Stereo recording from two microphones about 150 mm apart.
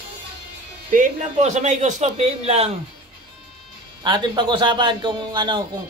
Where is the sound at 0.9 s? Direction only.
55° right (ahead or behind).